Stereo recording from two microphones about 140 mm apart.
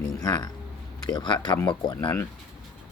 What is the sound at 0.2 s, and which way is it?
Speech, 25° left (ahead or behind).